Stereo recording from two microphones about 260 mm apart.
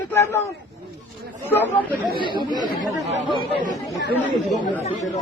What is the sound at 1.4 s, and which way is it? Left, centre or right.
Speech, centre.